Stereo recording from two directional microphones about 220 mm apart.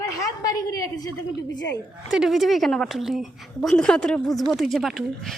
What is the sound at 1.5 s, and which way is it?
Speech, 55° left (ahead or behind).